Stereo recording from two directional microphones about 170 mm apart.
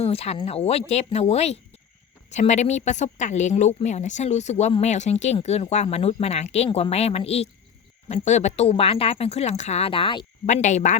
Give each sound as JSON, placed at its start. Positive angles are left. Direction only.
{"t": 0.0, "sound": "speech", "side_deg": 35}
{"t": 10.4, "sound": "speech", "side_deg": 45}